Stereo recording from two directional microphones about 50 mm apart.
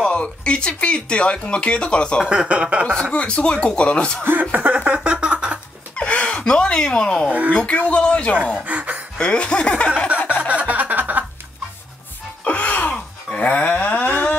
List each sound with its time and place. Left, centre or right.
0.1 s speech: left
2.2 s speech: right
3.0 s speech: left
4.2 s speech: right
5.9 s a sound: left
6.4 s speech: centre
7.2 s speech: right
7.5 s speech: left
8.6 s a sound: right
9.2 s speech: centre
10.2 s music: centre
10.5 s music: right
12.4 s music: left
13.3 s livestock: left